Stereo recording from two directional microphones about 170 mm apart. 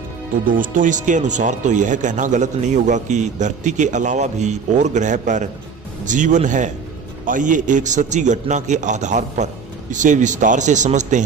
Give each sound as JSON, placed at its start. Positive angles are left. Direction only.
{"t": 0.5, "sound": "speech", "side_deg": -50}